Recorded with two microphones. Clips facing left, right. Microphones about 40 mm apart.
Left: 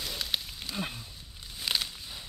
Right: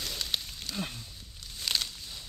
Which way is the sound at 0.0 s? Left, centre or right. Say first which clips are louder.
Left 1 dB; centre.